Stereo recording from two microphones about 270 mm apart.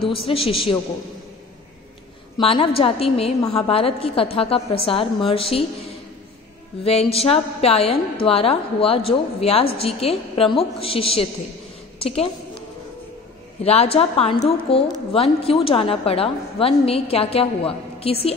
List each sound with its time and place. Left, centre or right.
0.1 s a woman's voice: centre
2.3 s a woman's voice: centre
6.8 s a woman's voice: left
13.6 s a woman's voice: left